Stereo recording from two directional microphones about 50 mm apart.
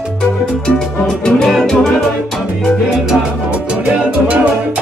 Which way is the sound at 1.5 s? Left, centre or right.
Centre.